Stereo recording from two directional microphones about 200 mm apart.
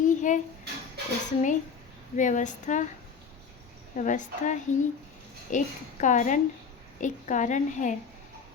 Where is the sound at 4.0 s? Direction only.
40° left (ahead or behind).